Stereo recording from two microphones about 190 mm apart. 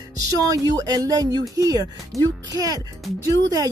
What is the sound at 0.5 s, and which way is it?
Speech, 20° right (ahead or behind).